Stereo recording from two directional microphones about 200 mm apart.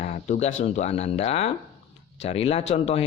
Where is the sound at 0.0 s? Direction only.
35° left (ahead or behind).